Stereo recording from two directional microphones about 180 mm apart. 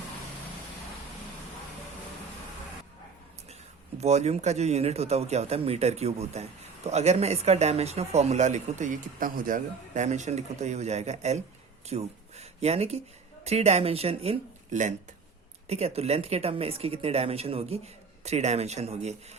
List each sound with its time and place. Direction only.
4.0 s speech: 40° right (ahead or behind)